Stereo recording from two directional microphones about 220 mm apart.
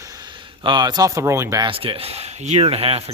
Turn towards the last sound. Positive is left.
turn(degrees=-25)  # may be behind; listen again after turning